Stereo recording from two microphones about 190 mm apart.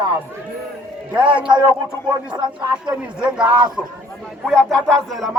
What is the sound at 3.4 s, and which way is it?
Speech, 25° right (ahead or behind).